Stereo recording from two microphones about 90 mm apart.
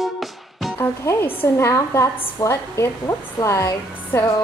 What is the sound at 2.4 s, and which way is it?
A woman's voice, 35° left (ahead or behind).